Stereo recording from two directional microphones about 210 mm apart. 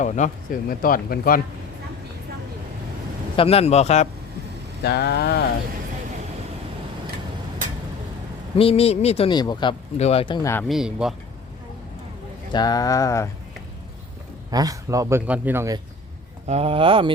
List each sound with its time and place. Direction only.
0.0 s speech: 35° left (ahead or behind)
3.3 s a man's voice: 30° left (ahead or behind)
4.8 s speech: 50° left (ahead or behind)
8.5 s speech: 30° left (ahead or behind)
10.7 s speech: 5° right (ahead or behind)
12.5 s speech: 20° left (ahead or behind)
14.5 s a man's voice: 15° right (ahead or behind)
16.5 s speech: 30° right (ahead or behind)